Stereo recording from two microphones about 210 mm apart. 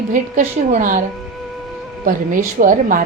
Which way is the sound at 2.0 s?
40° right (ahead or behind).